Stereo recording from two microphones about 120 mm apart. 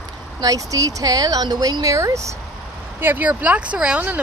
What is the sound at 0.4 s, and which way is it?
Speech, 30° right (ahead or behind).